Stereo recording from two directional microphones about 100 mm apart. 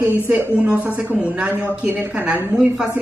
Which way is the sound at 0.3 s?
15° right (ahead or behind).